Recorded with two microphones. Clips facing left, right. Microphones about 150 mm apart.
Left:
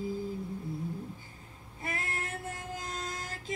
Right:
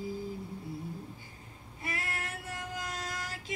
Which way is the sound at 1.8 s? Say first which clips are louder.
Left 1 dB; 50° left (ahead or behind).